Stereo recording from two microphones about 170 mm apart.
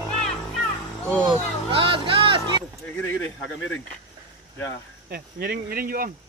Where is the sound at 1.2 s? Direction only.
30° right (ahead or behind).